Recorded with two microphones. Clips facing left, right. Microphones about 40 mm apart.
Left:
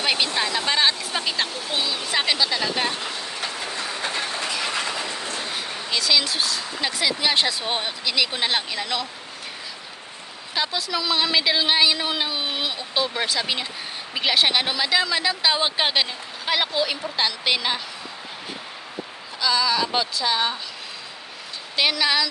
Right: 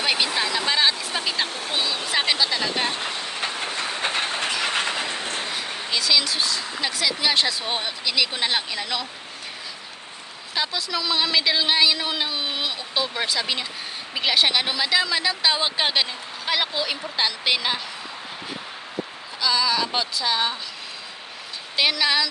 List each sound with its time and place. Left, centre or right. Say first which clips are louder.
0.0 s a woman's voice: even; centre
1.5 s speech: right 1 dB; right
1.7 s a woman's voice: even; centre
2.9 s train: right 1 dB; right
5.9 s a woman's voice: even; centre
10.5 s a woman's voice: left 1 dB; centre
19.4 s a woman's voice: left 1 dB; centre
21.8 s a woman's voice: even; centre